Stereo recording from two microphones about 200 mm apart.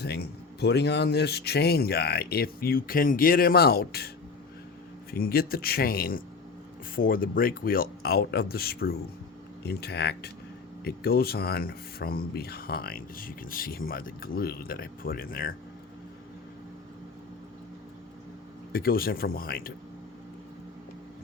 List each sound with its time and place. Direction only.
0.0 s speech: 55° left (ahead or behind)
5.1 s speech: 50° left (ahead or behind)
18.7 s speech: 50° left (ahead or behind)